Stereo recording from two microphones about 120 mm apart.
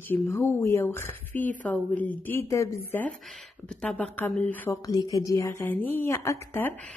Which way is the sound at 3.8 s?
10° left (ahead or behind).